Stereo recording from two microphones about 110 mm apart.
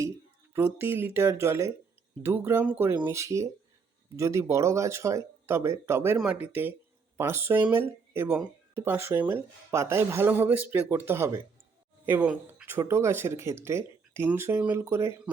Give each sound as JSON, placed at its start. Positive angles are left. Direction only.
{"t": 0.5, "sound": "speech", "side_deg": -20}
{"t": 12.8, "sound": "speech", "side_deg": -25}